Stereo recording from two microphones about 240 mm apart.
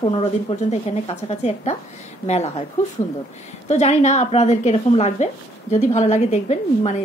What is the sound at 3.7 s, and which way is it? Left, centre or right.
Speech, left.